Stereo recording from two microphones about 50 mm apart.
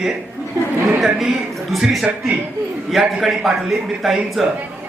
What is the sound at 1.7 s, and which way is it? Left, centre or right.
Speech, centre.